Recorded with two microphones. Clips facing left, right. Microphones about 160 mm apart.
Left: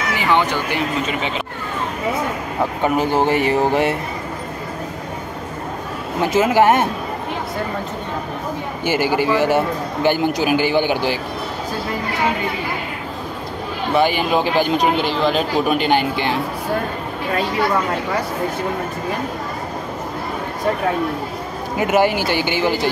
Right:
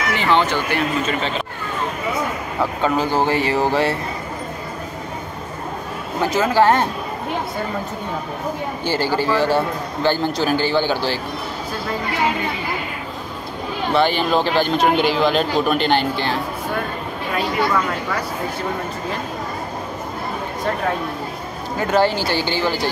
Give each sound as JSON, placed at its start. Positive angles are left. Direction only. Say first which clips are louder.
{"t": 0.1, "sound": "speech", "louder": "even", "side_deg": 15}
{"t": 2.8, "sound": "speech", "louder": "left 2 dB", "side_deg": 20}
{"t": 6.3, "sound": "speech", "louder": "left 2 dB", "side_deg": 20}
{"t": 8.8, "sound": "speech", "louder": "left 2 dB", "side_deg": 15}
{"t": 13.9, "sound": "speech", "louder": "left 1 dB", "side_deg": 10}
{"t": 15.0, "sound": "speech", "louder": "right 1 dB", "side_deg": 0}
{"t": 21.7, "sound": "speech", "louder": "left 1 dB", "side_deg": 15}